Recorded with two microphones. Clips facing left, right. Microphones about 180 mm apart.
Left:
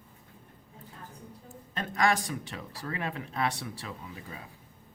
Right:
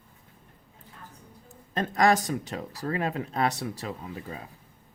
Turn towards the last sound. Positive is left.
turn(degrees=-40)  # may be behind; listen again after turning